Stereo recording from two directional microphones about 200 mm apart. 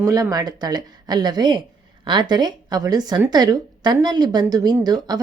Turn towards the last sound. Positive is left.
turn(degrees=-20)  # may be behind; listen again after turning